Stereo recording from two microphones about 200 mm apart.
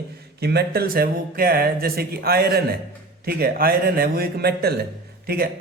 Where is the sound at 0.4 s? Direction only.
50° right (ahead or behind).